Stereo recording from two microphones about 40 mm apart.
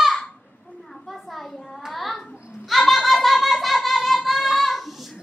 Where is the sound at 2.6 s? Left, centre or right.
Centre.